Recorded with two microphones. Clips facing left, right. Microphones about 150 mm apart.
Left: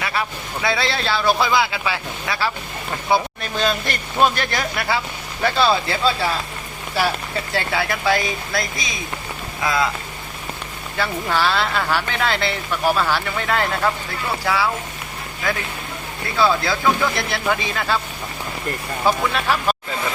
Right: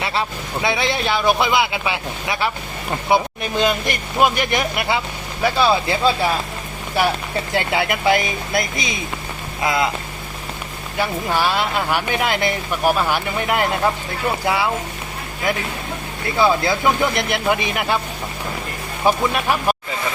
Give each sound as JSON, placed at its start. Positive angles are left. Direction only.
{"t": 0.0, "sound": "speech", "side_deg": -25}
{"t": 7.5, "sound": "speech", "side_deg": -20}
{"t": 10.9, "sound": "speech", "side_deg": -15}
{"t": 19.0, "sound": "speech", "side_deg": -15}